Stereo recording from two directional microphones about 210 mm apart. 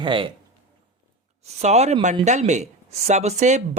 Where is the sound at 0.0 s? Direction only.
25° right (ahead or behind).